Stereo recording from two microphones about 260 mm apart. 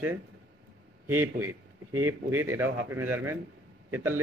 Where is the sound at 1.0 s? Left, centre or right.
Centre.